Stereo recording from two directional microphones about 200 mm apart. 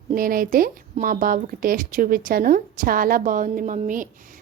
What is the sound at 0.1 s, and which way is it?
Speech, 45° right (ahead or behind).